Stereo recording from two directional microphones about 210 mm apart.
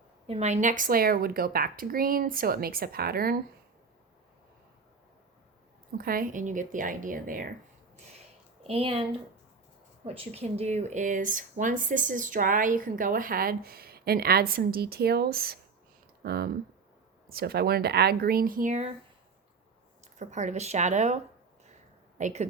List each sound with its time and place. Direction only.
0.3 s speech: 30° right (ahead or behind)
6.0 s speech: 45° right (ahead or behind)
8.6 s speech: 25° right (ahead or behind)
10.2 s speech: 30° right (ahead or behind)
20.1 s speech: 35° right (ahead or behind)
22.2 s speech: 35° right (ahead or behind)